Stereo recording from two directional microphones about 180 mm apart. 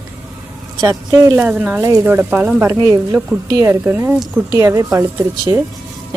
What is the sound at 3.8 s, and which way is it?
A woman's voice, 10° right (ahead or behind).